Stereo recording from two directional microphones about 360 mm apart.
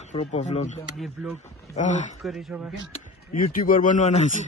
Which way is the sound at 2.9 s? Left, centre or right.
Left.